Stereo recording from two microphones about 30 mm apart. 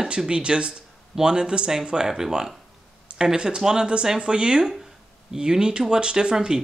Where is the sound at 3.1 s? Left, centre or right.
Right.